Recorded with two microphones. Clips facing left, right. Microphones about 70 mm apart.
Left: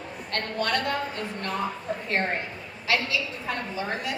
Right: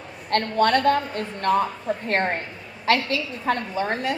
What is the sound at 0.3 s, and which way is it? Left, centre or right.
A woman's voice, right.